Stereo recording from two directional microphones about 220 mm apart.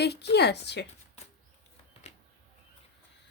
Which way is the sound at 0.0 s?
50° left (ahead or behind).